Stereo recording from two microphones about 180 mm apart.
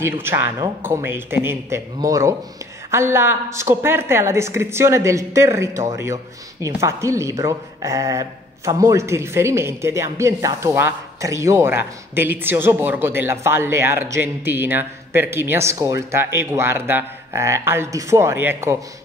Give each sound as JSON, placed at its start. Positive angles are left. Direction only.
{"t": 0.0, "sound": "speech", "side_deg": -15}